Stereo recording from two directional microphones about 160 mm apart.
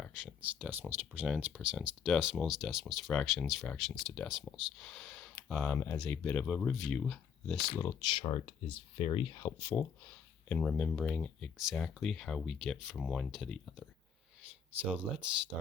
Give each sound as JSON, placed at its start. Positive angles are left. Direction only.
{"t": 0.2, "sound": "speech", "side_deg": -10}
{"t": 5.7, "sound": "speech", "side_deg": 15}
{"t": 7.8, "sound": "speech", "side_deg": 25}
{"t": 9.6, "sound": "speech", "side_deg": 10}
{"t": 14.8, "sound": "speech", "side_deg": -5}